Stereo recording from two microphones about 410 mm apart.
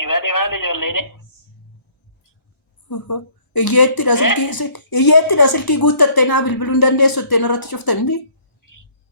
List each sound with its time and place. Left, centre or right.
0.0 s a man's voice: left
2.9 s a woman's voice: left